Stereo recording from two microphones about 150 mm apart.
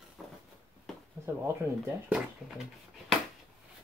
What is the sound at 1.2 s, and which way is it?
Speech, 15° right (ahead or behind).